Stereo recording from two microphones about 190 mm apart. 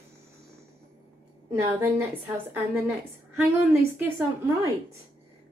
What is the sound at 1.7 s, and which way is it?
Speech, 10° right (ahead or behind).